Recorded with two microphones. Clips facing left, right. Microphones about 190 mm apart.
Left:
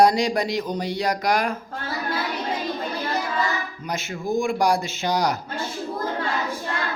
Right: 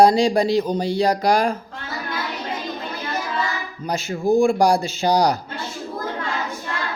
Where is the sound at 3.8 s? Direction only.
35° right (ahead or behind).